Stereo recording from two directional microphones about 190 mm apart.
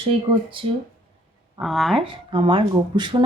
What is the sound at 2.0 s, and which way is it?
A woman's voice, 25° right (ahead or behind).